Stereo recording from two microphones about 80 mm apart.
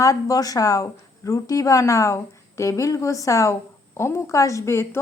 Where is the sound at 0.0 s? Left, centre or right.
Left.